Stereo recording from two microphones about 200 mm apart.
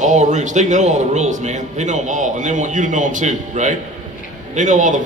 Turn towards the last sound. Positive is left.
turn(degrees=-40)  # may be behind; listen again after turning